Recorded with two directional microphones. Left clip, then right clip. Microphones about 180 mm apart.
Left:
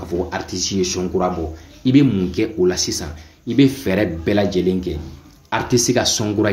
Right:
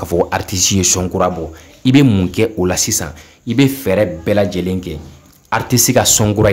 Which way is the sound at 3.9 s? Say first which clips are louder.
Right 5 dB; 25° right (ahead or behind).